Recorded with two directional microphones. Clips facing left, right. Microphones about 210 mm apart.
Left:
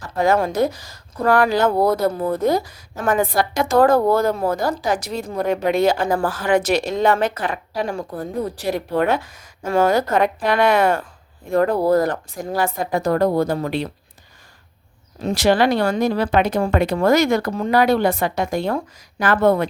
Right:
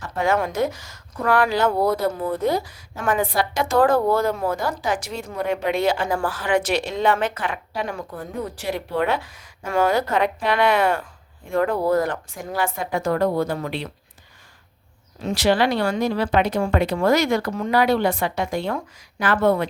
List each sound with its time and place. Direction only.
0.2 s speech: 35° left (ahead or behind)
15.2 s speech: 40° left (ahead or behind)